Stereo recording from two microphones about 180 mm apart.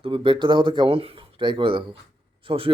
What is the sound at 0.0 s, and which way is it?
Speech, 30° right (ahead or behind).